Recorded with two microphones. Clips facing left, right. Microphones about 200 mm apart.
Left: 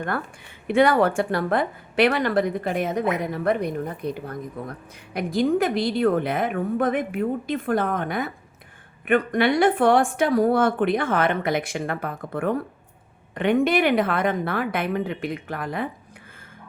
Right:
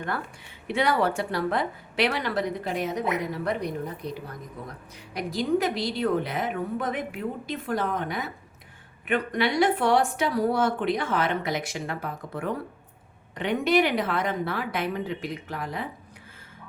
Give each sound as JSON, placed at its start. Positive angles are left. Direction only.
{"t": 0.7, "sound": "a woman's voice", "side_deg": 50}